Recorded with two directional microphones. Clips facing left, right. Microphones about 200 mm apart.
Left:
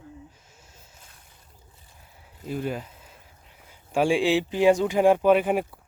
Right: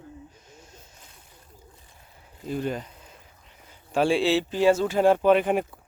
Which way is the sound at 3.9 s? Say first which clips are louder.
Even; 10° left (ahead or behind).